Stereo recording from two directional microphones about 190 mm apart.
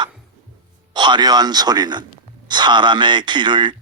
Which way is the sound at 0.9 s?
25° right (ahead or behind).